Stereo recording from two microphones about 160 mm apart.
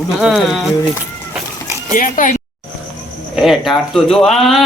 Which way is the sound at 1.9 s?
55° left (ahead or behind).